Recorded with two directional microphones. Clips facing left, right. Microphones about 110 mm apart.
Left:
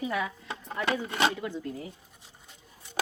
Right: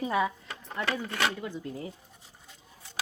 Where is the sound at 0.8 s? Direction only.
20° left (ahead or behind).